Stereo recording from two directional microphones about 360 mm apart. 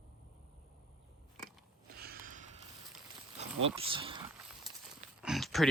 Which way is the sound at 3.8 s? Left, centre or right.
Centre.